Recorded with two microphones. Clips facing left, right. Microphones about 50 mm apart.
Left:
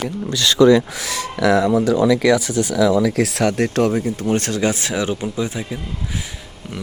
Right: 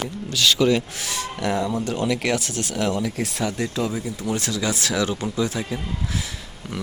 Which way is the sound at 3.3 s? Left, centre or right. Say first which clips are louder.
Left 7 dB; left.